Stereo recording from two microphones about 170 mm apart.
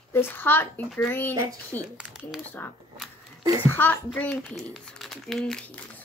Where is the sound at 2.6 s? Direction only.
15° left (ahead or behind).